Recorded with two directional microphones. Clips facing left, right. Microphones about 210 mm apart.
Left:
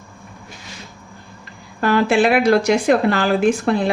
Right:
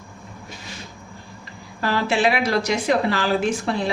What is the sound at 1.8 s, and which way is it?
Speech, 55° left (ahead or behind).